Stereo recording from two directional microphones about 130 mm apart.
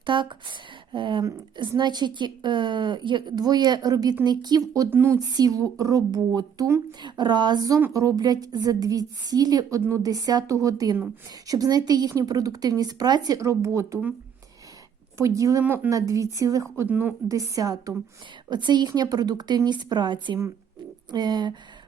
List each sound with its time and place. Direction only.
0.0 s a woman's voice: 40° right (ahead or behind); by 5.2 s 20° right (ahead or behind)
5.2 s a woman's voice: 30° right (ahead or behind)
15.2 s speech: 25° right (ahead or behind)
15.6 s speech: 15° right (ahead or behind)
15.9 s speech: 25° right (ahead or behind)
16.7 s speech: 15° right (ahead or behind)
17.2 s a woman's voice: 25° right (ahead or behind)